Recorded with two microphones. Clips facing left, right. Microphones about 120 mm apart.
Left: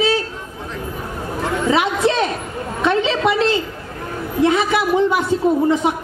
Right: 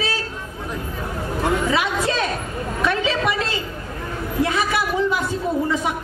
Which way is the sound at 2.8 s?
25° left (ahead or behind).